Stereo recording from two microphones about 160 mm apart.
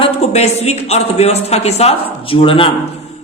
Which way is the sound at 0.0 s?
40° left (ahead or behind).